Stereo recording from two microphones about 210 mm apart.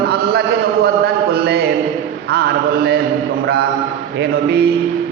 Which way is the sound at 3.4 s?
50° right (ahead or behind).